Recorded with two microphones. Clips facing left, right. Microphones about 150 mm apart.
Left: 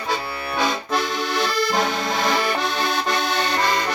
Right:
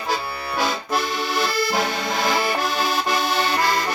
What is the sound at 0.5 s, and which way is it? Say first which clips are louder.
Accordion: left 1 dB; 5° right (ahead or behind).